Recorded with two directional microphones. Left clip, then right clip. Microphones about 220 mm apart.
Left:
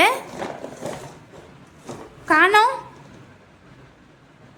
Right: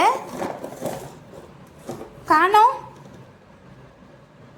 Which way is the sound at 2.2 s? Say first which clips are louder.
Even; 15° left (ahead or behind).